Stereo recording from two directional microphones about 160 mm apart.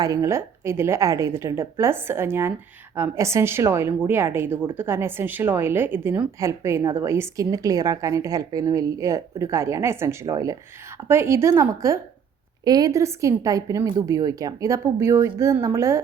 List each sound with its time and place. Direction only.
0.0 s a woman's voice: 20° right (ahead or behind)